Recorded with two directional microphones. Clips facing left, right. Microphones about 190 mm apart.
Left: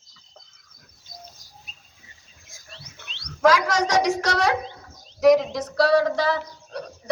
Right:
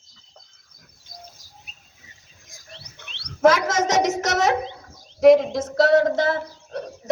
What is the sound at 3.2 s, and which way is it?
A woman's voice, 25° right (ahead or behind).